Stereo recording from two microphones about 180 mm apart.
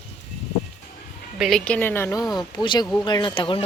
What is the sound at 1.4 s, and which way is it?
Speech, centre (ahead or behind).